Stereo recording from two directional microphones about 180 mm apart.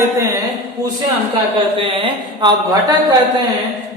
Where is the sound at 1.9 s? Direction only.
25° right (ahead or behind).